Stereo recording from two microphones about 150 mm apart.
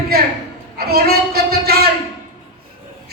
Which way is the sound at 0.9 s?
90° right.